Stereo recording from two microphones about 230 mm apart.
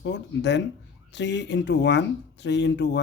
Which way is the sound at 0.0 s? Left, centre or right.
Left.